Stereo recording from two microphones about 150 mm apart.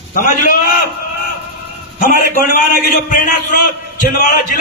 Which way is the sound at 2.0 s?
65° left (ahead or behind).